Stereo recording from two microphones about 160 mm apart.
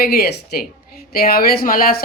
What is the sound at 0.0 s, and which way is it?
A woman's voice, 75° left (ahead or behind).